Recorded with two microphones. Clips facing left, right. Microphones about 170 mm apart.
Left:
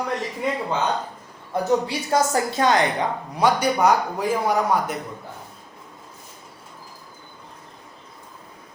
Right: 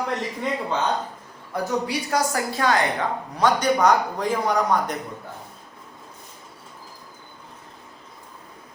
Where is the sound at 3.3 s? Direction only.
10° left (ahead or behind).